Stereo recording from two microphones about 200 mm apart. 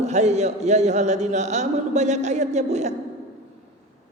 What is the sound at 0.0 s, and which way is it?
A man's voice, 35° right (ahead or behind).